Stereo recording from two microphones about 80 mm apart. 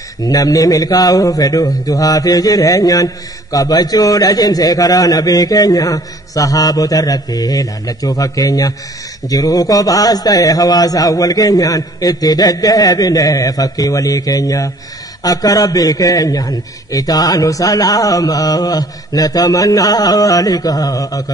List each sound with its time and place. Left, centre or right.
0.2 s a man's voice: left